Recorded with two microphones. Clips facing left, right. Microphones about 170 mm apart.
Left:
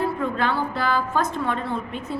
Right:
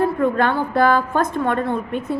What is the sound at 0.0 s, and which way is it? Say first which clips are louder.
A woman's voice: right 6 dB; 55° right (ahead or behind).